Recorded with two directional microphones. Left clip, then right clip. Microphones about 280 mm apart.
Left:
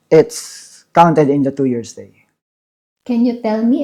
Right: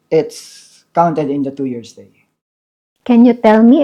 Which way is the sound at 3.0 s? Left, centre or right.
Right.